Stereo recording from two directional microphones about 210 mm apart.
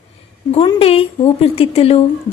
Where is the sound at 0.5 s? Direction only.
30° left (ahead or behind).